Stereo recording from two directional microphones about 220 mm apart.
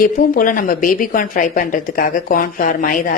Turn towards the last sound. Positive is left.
turn(degrees=40)  # may be behind; listen again after turning